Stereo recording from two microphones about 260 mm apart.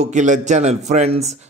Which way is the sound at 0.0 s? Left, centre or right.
Right.